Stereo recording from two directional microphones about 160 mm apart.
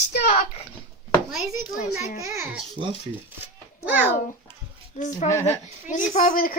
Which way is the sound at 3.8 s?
10° right (ahead or behind).